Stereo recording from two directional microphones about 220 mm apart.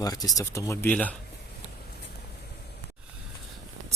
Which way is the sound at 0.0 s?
15° left (ahead or behind).